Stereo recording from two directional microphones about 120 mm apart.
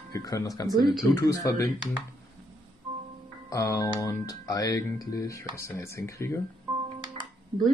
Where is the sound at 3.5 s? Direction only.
30° left (ahead or behind).